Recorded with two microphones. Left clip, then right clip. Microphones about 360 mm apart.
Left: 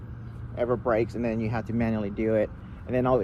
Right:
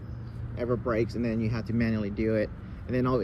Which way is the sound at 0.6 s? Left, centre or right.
Centre.